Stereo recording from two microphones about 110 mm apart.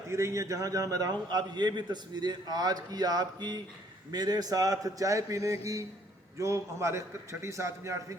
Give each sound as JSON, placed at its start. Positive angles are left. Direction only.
{"t": 0.1, "sound": "a man's voice", "side_deg": -25}